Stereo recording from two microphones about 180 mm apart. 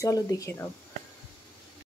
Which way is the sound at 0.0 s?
20° left (ahead or behind).